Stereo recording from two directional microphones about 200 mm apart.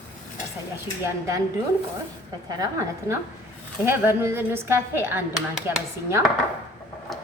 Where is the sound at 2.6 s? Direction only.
15° right (ahead or behind).